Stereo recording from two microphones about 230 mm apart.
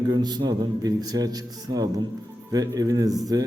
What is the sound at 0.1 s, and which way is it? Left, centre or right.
A man's voice, centre.